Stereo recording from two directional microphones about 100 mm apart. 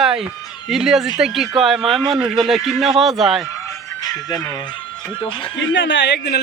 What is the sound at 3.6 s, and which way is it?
Music, 40° left (ahead or behind).